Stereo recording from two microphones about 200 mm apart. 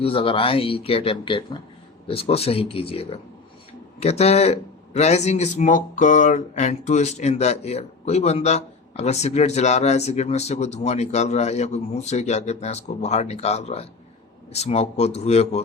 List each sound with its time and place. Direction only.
0.0 s speech: 25° left (ahead or behind)